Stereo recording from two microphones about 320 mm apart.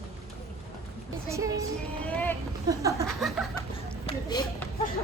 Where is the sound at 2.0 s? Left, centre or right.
Centre.